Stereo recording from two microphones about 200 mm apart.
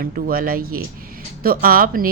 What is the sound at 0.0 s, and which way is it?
Speech, 45° right (ahead or behind).